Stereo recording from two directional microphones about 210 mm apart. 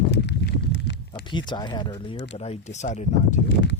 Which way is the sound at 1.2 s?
20° left (ahead or behind).